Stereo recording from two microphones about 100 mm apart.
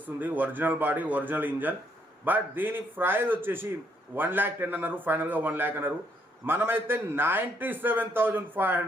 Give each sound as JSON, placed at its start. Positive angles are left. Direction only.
{"t": 0.0, "sound": "a man's voice", "side_deg": -15}